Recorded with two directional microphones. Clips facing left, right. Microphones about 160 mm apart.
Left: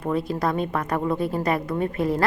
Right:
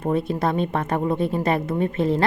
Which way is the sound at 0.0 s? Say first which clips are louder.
Right 2 dB; 25° right (ahead or behind).